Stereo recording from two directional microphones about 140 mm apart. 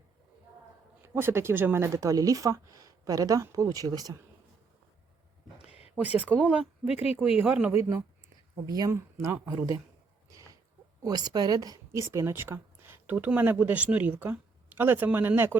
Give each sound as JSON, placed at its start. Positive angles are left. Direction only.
{"t": 1.0, "sound": "speech", "side_deg": -15}
{"t": 6.0, "sound": "speech", "side_deg": -10}
{"t": 7.8, "sound": "speech", "side_deg": -20}
{"t": 10.2, "sound": "a sound", "side_deg": -25}
{"t": 11.0, "sound": "speech", "side_deg": -30}